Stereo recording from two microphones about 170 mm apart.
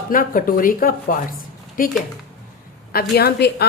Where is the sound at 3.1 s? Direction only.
70° left (ahead or behind).